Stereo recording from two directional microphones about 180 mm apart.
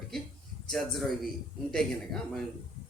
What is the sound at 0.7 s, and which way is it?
Speech, centre (ahead or behind).